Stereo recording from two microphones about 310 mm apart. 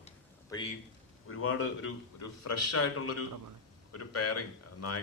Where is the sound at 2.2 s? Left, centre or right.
Left.